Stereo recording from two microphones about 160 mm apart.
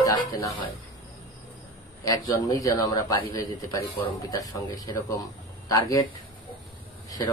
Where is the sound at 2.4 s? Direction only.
20° left (ahead or behind).